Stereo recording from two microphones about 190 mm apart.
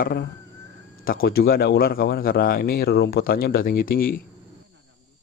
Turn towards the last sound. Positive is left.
turn(degrees=50)  # may be behind; listen again after turning